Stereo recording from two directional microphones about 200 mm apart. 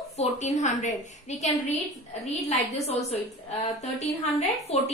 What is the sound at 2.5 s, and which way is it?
A woman's voice, 30° left (ahead or behind).